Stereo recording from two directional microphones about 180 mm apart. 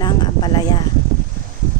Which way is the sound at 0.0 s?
25° left (ahead or behind).